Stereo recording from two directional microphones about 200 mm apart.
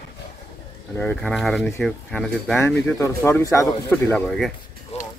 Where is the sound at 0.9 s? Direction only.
5° left (ahead or behind).